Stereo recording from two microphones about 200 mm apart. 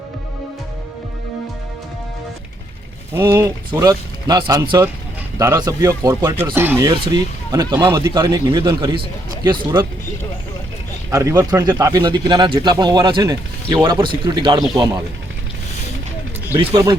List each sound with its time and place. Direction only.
3.2 s speech: 10° right (ahead or behind)
11.1 s speech: 15° right (ahead or behind)
16.6 s speech: 20° right (ahead or behind)